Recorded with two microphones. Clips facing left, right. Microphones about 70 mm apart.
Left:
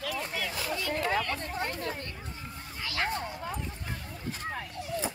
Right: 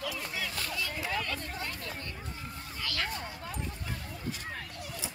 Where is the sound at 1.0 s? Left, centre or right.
Left.